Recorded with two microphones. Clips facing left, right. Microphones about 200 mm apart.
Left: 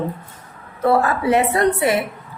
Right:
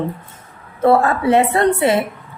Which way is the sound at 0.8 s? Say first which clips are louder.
Right 3 dB; 25° right (ahead or behind).